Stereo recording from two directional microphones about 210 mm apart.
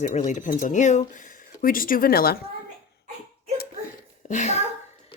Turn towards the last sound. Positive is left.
turn(degrees=35)  # may be behind; listen again after turning